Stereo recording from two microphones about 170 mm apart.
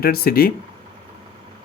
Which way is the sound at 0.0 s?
60° left (ahead or behind).